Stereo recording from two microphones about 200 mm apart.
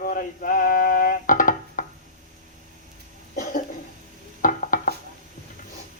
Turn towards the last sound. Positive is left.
turn(degrees=40)  # may be behind; listen again after turning